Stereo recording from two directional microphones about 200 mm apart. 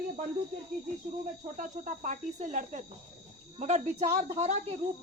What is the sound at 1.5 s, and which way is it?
Speech, 40° right (ahead or behind).